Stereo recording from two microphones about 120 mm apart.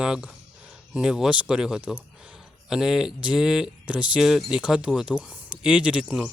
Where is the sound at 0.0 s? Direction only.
5° right (ahead or behind).